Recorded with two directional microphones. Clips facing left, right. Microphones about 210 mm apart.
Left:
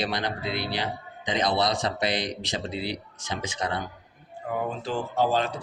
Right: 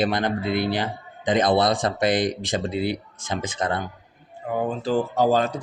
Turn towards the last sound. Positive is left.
turn(degrees=-40)  # may be behind; listen again after turning